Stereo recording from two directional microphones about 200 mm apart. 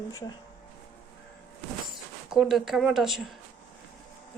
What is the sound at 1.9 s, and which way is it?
Speech, centre (ahead or behind).